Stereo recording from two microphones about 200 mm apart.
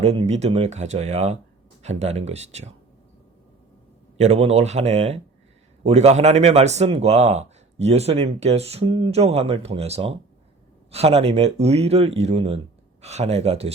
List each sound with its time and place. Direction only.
0.0 s a man's voice: 30° right (ahead or behind)
4.2 s a man's voice: 30° right (ahead or behind)